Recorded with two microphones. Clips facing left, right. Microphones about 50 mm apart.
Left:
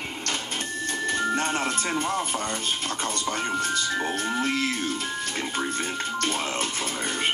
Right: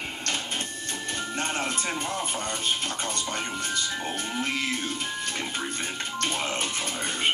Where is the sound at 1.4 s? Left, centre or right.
Left.